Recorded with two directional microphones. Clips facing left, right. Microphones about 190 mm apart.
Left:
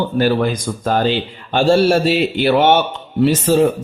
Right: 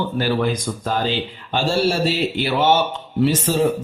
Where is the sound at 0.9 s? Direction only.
55° left (ahead or behind).